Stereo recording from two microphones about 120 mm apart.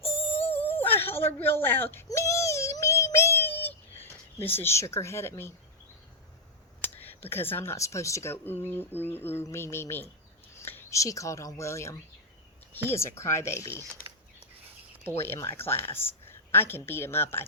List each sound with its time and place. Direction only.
0.0 s music: 55° left (ahead or behind)
0.4 s whimper: 15° left (ahead or behind)
2.0 s child singing: 25° left (ahead or behind)
6.8 s speech: 15° left (ahead or behind)
13.7 s speech: 25° right (ahead or behind)
15.0 s a woman's voice: 20° left (ahead or behind)